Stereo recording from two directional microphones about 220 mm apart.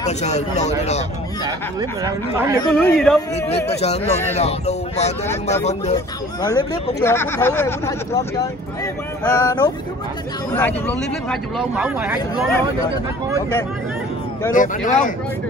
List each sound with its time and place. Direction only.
0.2 s speech: 30° left (ahead or behind)
1.4 s speech: 15° right (ahead or behind)
2.7 s speech: 5° left (ahead or behind)
3.8 s speech: 30° left (ahead or behind)
6.4 s speech: 15° left (ahead or behind)
9.3 s speech: 15° left (ahead or behind); by 12.4 s 10° right (ahead or behind)
14.5 s speech: 35° left (ahead or behind)